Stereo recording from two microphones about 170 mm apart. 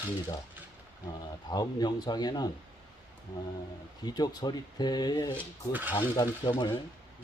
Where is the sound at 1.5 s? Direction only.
25° left (ahead or behind).